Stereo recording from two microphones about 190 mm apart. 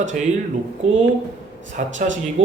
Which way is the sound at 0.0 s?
40° right (ahead or behind).